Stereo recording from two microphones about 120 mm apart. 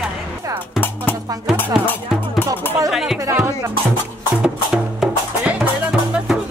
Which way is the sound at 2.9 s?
5° right (ahead or behind).